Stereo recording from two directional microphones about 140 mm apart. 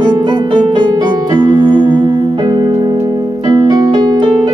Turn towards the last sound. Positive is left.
turn(degrees=-30)  # may be behind; listen again after turning